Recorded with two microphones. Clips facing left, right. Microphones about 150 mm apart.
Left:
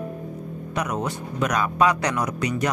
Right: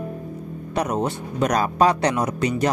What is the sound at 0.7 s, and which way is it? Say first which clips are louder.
Speech: right 4 dB; 30° right (ahead or behind).